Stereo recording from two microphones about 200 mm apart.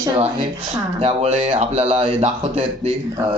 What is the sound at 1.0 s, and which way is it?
Speech, 30° right (ahead or behind).